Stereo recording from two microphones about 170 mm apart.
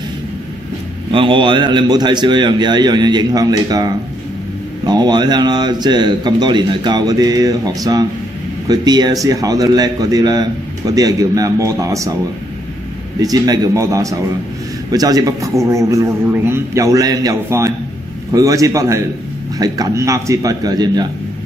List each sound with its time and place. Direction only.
1.1 s a man's voice: 30° right (ahead or behind)
13.2 s a man's voice: 20° right (ahead or behind)